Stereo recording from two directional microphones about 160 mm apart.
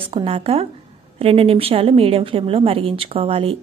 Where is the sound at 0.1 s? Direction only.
35° right (ahead or behind).